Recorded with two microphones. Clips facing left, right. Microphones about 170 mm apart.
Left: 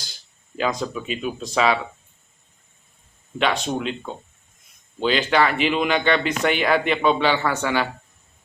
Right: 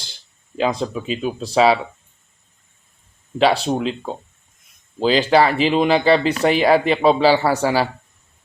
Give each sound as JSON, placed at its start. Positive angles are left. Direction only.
{"t": 0.5, "sound": "speech", "side_deg": -30}
{"t": 3.3, "sound": "speech", "side_deg": -35}